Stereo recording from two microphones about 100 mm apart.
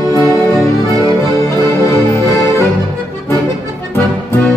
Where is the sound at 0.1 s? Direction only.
35° right (ahead or behind).